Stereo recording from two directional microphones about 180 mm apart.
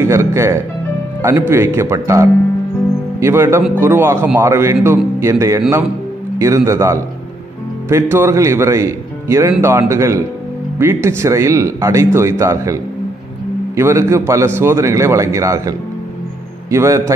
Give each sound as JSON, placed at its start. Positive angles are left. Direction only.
{"t": 0.0, "sound": "a man's voice", "side_deg": -15}
{"t": 13.7, "sound": "a man's voice", "side_deg": -15}
{"t": 16.7, "sound": "a man's voice", "side_deg": -15}